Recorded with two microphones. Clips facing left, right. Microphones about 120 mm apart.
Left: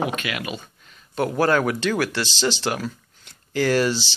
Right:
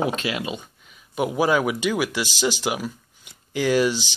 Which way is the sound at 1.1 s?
10° right (ahead or behind).